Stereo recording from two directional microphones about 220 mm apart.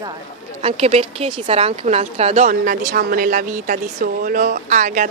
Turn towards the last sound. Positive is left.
turn(degrees=-35)  # may be behind; listen again after turning